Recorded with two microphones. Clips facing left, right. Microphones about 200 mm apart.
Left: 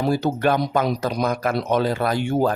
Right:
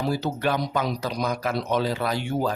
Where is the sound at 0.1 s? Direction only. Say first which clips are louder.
Left 5 dB; 50° left (ahead or behind).